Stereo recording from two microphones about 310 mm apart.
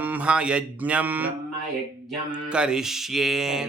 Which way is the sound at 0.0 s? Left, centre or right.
Centre.